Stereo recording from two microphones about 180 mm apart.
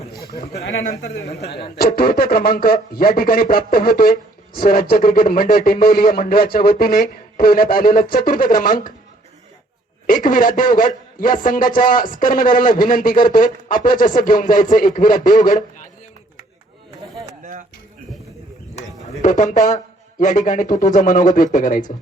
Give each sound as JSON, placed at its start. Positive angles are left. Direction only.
{"t": 1.0, "sound": "a woman's voice", "side_deg": 70}
{"t": 2.0, "sound": "a man's voice", "side_deg": 55}
{"t": 10.1, "sound": "a man's voice", "side_deg": 50}
{"t": 17.4, "sound": "a sound", "side_deg": -45}
{"t": 19.2, "sound": "a man's voice", "side_deg": 45}